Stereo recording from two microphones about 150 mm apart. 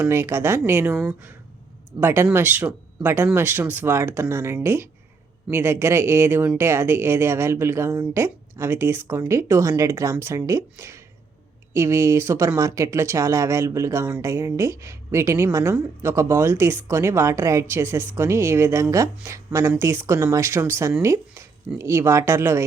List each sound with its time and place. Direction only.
0.0 s a woman's voice: 15° right (ahead or behind)